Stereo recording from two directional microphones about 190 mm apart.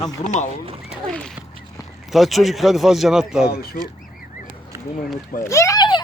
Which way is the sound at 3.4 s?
55° left (ahead or behind).